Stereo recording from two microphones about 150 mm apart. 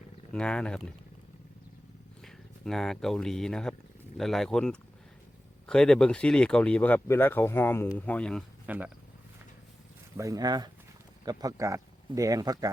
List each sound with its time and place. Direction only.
0.3 s speech: 5° left (ahead or behind)
2.2 s speech: 5° left (ahead or behind)
8.6 s speech: 10° right (ahead or behind)
10.2 s speech: 25° right (ahead or behind)